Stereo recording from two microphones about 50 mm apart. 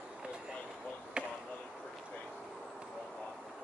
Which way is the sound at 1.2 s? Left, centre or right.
Right.